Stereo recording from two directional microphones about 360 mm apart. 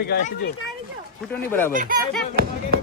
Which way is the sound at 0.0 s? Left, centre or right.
Left.